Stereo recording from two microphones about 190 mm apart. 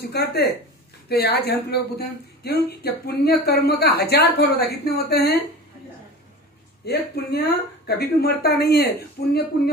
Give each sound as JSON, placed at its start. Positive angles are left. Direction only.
{"t": 0.0, "sound": "speech", "side_deg": 55}
{"t": 6.9, "sound": "speech", "side_deg": 55}